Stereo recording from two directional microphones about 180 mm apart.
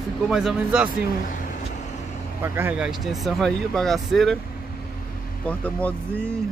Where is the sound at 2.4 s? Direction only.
15° right (ahead or behind).